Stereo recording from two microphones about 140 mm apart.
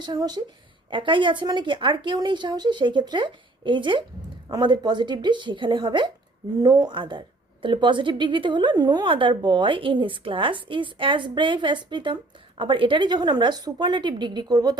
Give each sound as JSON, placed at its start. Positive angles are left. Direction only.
{"t": 0.0, "sound": "a woman's voice", "side_deg": -30}